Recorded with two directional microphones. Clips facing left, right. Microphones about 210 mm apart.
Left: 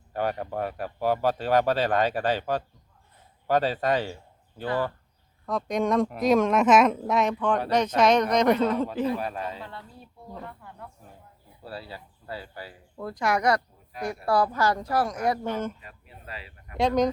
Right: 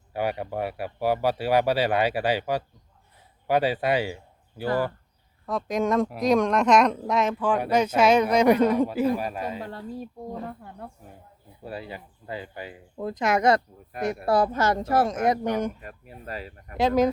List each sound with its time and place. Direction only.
0.1 s speech: 10° right (ahead or behind)
9.6 s speech: 45° right (ahead or behind)
11.6 s speech: 15° right (ahead or behind)
15.8 s speech: 45° right (ahead or behind)
16.7 s speech: 5° right (ahead or behind)